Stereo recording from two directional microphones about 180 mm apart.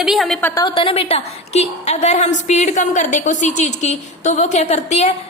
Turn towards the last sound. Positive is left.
turn(degrees=40)  # may be behind; listen again after turning